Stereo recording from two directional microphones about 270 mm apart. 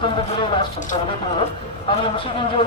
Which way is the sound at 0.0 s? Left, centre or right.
Centre.